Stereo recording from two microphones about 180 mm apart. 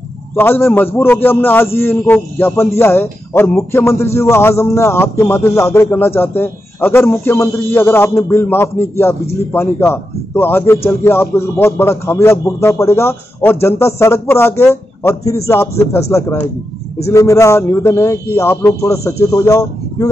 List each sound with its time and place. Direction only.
0.4 s speech: 10° left (ahead or behind)